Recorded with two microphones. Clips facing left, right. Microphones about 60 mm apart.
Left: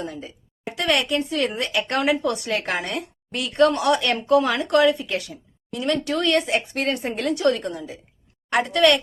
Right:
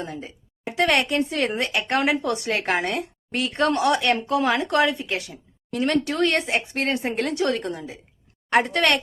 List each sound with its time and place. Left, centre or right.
0.0 s speech: right
5.7 s speech: right